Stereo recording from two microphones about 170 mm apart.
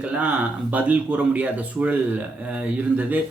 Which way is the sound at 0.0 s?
10° right (ahead or behind).